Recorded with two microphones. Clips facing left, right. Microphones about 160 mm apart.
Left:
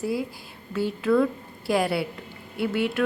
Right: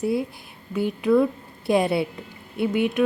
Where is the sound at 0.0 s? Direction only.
25° right (ahead or behind).